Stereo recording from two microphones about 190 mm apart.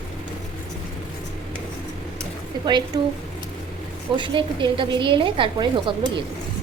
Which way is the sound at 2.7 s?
25° right (ahead or behind).